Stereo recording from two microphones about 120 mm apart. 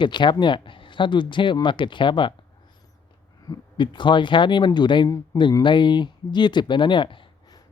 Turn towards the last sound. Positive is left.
turn(degrees=45)  # may be behind; listen again after turning